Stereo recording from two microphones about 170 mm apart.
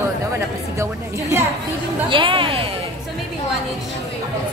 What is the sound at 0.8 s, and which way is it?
Speech, 15° right (ahead or behind).